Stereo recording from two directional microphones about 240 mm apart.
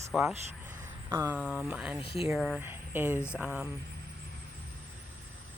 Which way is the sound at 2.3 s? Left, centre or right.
Centre.